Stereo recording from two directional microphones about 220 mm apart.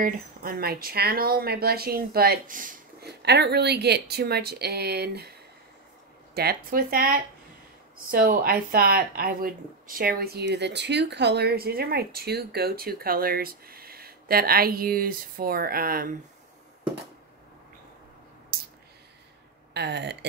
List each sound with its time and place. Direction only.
0.0 s speech: 40° right (ahead or behind)
6.3 s speech: 45° right (ahead or behind)
18.5 s a sound: 40° right (ahead or behind)
19.7 s speech: 50° right (ahead or behind)